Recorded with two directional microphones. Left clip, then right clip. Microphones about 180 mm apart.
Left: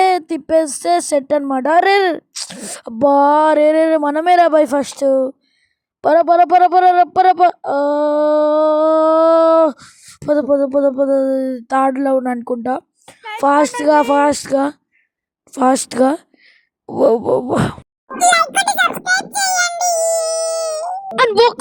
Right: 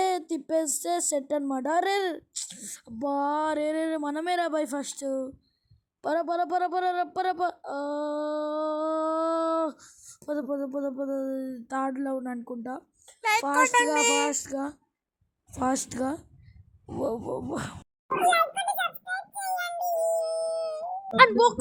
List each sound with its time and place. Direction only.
0.0 s a man's voice: 35° left (ahead or behind)
18.3 s a sound: 65° left (ahead or behind)
21.2 s speech: 50° left (ahead or behind)